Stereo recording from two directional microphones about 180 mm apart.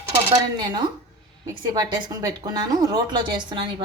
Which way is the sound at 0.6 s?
25° right (ahead or behind).